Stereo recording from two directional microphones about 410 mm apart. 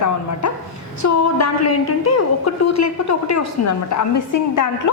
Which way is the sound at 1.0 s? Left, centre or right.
Left.